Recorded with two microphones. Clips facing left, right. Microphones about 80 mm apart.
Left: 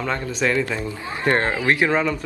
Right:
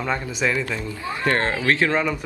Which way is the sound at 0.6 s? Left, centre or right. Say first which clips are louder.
Left 1 dB; left.